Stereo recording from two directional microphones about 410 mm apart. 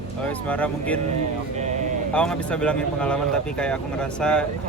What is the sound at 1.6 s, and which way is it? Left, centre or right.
Speech, centre.